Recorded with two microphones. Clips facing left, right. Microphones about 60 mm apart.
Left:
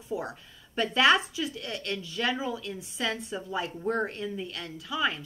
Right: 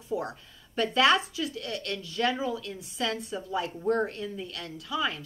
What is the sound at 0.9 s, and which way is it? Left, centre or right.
A woman's voice, centre.